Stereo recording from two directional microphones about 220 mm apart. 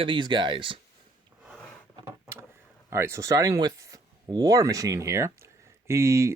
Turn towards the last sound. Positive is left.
turn(degrees=-15)  # may be behind; listen again after turning